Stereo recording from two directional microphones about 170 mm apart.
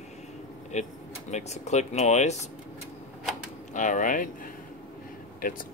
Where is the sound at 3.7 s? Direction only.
50° left (ahead or behind).